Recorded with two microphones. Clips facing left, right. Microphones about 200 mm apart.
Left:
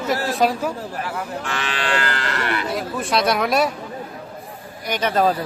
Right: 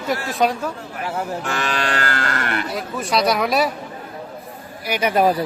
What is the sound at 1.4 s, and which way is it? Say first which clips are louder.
Livestock: even; 45° right (ahead or behind).